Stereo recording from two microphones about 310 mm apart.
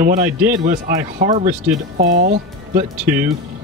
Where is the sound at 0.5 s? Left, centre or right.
Right.